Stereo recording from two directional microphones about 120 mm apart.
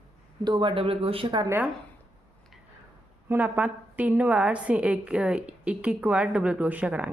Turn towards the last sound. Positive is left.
turn(degrees=-10)  # may be behind; listen again after turning